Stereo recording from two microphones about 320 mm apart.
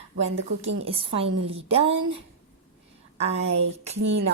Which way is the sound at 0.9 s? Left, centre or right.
Centre.